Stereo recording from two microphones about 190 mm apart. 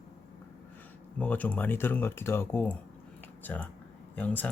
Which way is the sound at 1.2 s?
10° left (ahead or behind).